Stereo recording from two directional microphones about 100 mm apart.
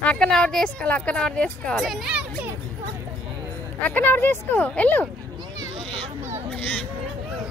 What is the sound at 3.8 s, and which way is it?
Speech, 15° left (ahead or behind).